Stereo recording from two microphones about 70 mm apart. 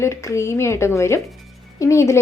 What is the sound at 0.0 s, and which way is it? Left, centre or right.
Speech, left.